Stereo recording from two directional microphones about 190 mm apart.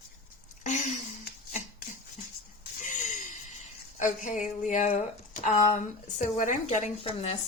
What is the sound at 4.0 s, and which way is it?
Speech, 45° left (ahead or behind).